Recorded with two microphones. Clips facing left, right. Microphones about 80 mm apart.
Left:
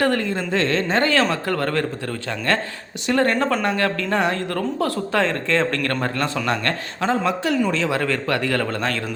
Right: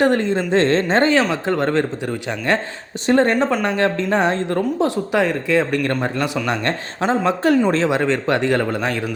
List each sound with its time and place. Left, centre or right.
0.0 s speech: right
7.3 s speech: right
7.9 s speech: right